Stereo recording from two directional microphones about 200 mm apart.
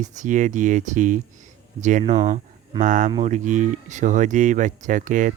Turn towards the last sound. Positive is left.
turn(degrees=-40)  # may be behind; listen again after turning